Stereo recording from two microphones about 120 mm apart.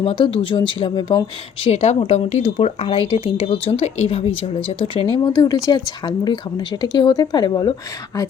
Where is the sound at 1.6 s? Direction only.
60° left (ahead or behind).